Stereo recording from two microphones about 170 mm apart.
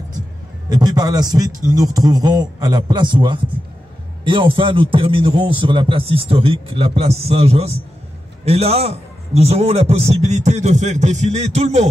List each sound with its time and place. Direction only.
0.7 s a man's voice: 25° right (ahead or behind); by 11.9 s 40° right (ahead or behind)